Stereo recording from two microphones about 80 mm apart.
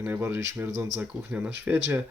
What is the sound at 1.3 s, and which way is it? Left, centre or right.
Speech, centre.